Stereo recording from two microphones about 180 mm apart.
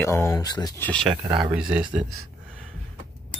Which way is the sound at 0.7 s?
10° left (ahead or behind).